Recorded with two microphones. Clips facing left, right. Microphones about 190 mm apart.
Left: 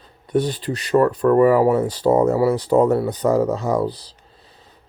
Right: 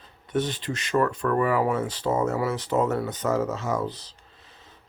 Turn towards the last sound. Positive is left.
turn(degrees=35)  # may be behind; listen again after turning